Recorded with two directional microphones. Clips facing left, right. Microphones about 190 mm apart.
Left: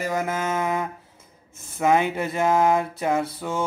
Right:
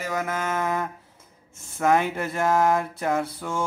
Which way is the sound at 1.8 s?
20° left (ahead or behind).